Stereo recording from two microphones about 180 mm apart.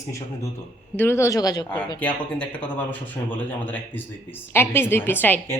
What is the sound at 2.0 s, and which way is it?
A woman's voice, 5° left (ahead or behind).